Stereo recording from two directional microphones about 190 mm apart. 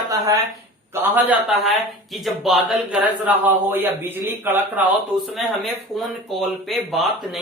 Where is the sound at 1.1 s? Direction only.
10° right (ahead or behind).